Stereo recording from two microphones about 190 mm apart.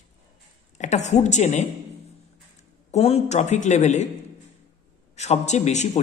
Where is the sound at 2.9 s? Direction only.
35° left (ahead or behind).